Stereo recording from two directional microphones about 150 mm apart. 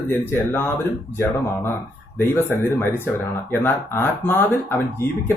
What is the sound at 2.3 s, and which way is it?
Speech, 15° left (ahead or behind).